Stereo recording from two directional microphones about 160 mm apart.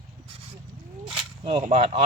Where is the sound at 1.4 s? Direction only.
40° right (ahead or behind).